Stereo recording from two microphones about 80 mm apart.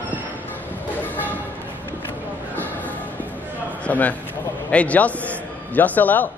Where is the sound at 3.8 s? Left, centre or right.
Centre.